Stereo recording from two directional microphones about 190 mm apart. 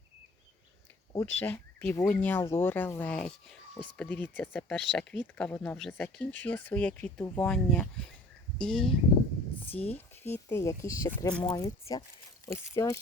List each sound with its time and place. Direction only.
1.1 s speech: 15° left (ahead or behind)
9.9 s speech: 10° left (ahead or behind)